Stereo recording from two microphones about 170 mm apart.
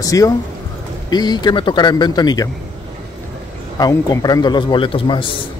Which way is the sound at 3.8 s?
25° left (ahead or behind).